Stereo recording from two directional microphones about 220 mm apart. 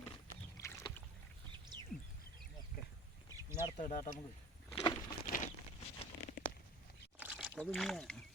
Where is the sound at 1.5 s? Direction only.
20° right (ahead or behind).